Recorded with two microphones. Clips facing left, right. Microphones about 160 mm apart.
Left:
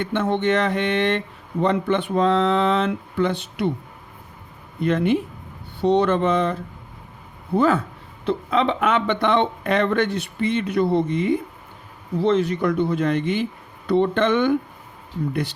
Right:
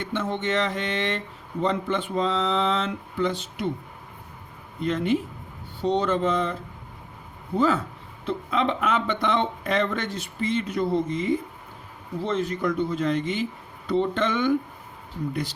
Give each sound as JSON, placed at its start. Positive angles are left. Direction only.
{"t": 0.0, "sound": "speech", "side_deg": 60}
{"t": 4.8, "sound": "speech", "side_deg": 60}
{"t": 8.2, "sound": "speech", "side_deg": 75}